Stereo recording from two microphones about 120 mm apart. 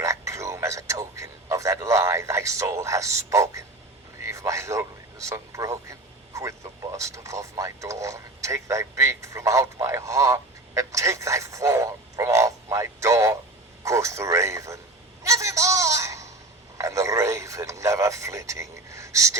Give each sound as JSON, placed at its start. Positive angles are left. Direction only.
{"t": 0.0, "sound": "a man's voice", "side_deg": -25}
{"t": 15.2, "sound": "a sound", "side_deg": -25}
{"t": 16.7, "sound": "a man's voice", "side_deg": -25}